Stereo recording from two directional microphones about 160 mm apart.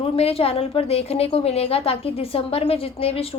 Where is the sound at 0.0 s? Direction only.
40° left (ahead or behind).